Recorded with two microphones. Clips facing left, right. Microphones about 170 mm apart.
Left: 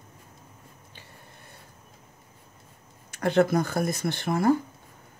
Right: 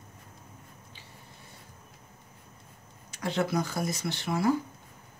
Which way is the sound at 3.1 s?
60° left (ahead or behind).